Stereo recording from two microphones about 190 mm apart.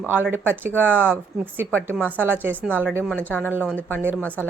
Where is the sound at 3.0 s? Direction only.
5° left (ahead or behind).